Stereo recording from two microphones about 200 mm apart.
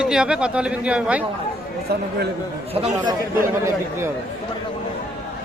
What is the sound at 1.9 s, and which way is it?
Speech, 50° right (ahead or behind).